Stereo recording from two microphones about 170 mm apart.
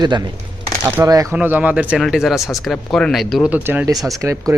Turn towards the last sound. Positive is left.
turn(degrees=-15)  # may be behind; listen again after turning